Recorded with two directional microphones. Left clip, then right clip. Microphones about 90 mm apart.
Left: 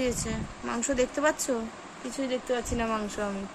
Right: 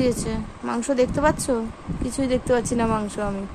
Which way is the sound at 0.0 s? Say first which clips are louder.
Right 7 dB; 40° right (ahead or behind).